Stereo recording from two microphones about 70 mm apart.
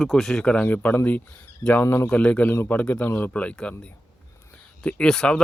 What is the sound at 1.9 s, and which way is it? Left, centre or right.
Speech, left.